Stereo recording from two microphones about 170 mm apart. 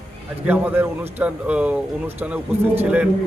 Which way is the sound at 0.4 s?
10° right (ahead or behind).